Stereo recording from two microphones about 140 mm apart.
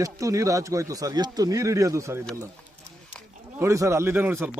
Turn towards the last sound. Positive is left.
turn(degrees=-15)  # may be behind; listen again after turning